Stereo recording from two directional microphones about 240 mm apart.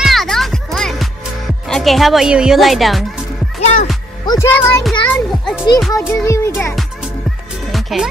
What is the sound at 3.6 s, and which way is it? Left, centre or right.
Music, left.